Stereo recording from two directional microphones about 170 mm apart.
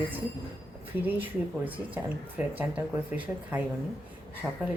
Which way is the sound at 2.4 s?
10° right (ahead or behind).